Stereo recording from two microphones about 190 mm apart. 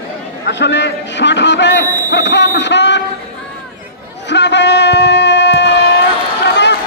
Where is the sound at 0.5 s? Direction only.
65° left (ahead or behind).